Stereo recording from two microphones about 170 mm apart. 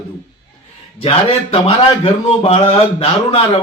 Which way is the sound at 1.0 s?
35° left (ahead or behind).